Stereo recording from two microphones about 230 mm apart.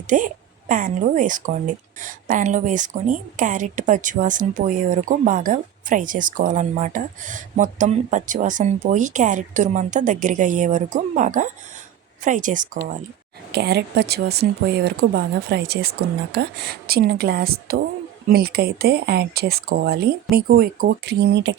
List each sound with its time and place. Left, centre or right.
0.1 s a woman's voice: right